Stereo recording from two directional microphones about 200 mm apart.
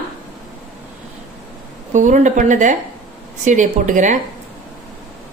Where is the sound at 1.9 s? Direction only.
40° right (ahead or behind).